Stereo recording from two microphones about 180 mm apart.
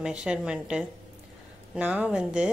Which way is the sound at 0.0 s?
5° right (ahead or behind).